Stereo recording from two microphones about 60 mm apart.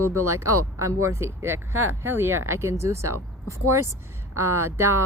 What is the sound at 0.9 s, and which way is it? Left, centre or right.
A woman's voice, right.